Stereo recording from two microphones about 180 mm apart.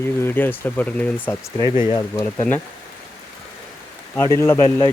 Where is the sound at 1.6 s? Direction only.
15° right (ahead or behind).